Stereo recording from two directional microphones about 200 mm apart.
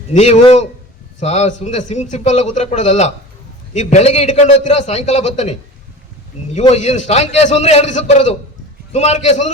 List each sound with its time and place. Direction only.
0.1 s a man's voice: 35° left (ahead or behind)